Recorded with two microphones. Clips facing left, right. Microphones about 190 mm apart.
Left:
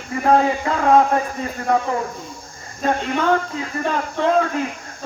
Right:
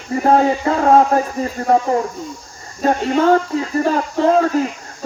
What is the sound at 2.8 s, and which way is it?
Speech, 35° right (ahead or behind).